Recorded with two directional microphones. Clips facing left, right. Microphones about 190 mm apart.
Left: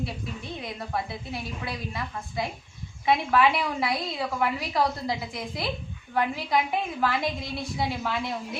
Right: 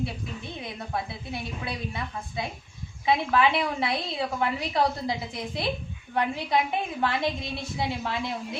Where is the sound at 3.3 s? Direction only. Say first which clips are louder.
Left 1 dB; 25° right (ahead or behind).